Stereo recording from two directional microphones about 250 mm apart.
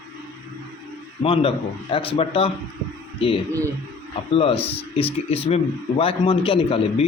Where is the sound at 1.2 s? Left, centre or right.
Left.